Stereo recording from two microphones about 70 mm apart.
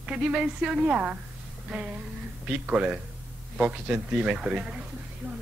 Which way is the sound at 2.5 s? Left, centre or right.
Centre.